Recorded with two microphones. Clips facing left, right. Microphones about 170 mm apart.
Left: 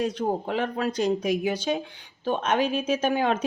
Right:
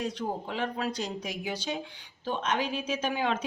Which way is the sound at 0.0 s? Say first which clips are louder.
Left 7 dB; 55° left (ahead or behind).